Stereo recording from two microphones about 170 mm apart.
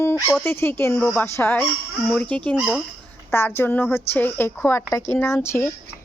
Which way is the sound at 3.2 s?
15° left (ahead or behind).